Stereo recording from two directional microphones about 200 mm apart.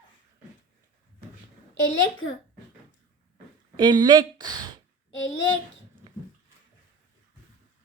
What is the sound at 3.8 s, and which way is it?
Speech, 20° right (ahead or behind).